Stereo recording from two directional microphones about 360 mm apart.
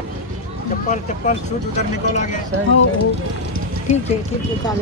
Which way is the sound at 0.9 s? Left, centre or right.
Centre.